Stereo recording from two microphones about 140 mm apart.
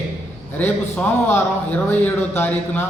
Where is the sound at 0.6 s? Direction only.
10° left (ahead or behind).